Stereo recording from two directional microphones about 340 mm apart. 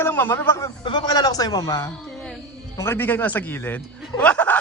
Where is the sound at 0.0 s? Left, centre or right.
Centre.